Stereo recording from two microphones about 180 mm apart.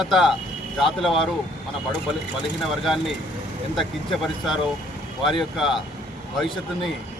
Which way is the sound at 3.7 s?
Centre (ahead or behind).